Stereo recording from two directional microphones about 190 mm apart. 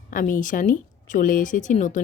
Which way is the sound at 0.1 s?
45° left (ahead or behind).